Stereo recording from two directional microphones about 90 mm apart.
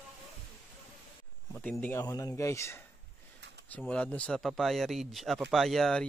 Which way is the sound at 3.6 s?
15° left (ahead or behind).